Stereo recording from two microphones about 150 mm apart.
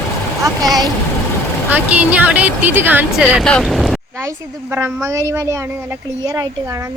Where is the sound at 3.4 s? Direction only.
Centre (ahead or behind).